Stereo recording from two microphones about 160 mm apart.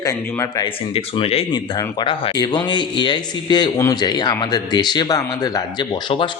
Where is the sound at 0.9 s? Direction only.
35° left (ahead or behind).